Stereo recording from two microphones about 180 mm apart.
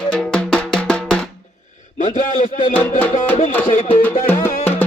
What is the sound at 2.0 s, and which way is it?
Speech, 45° left (ahead or behind).